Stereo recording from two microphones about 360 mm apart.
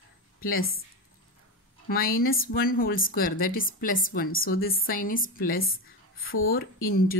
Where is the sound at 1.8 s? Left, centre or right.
Left.